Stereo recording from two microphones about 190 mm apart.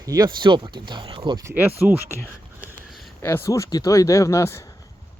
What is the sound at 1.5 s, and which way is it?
Speech, 10° right (ahead or behind).